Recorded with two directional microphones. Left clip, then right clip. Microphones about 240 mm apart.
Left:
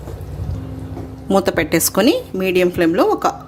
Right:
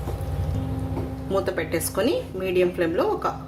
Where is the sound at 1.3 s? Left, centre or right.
Left.